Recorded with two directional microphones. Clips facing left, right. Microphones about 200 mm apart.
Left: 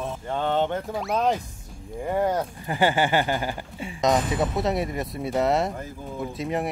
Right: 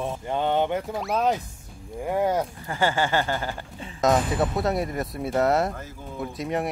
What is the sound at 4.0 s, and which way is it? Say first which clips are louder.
Speech: right 1 dB; centre (ahead or behind).